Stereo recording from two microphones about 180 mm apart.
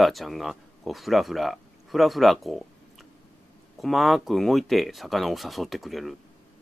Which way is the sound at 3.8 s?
Centre (ahead or behind).